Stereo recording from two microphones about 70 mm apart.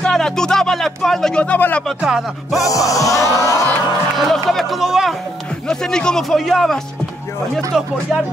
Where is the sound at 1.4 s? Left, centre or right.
Left.